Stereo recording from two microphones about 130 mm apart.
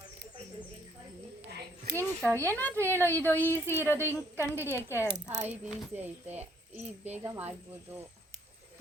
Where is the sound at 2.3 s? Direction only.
20° right (ahead or behind).